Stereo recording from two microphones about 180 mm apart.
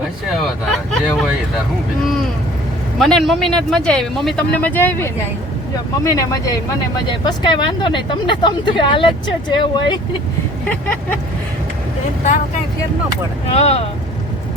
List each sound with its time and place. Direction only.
0.7 s vehicle: centre (ahead or behind)
3.0 s speech: centre (ahead or behind); by 10.0 s 25° left (ahead or behind)
10.7 s speech: 10° left (ahead or behind)
13.5 s speech: 35° left (ahead or behind)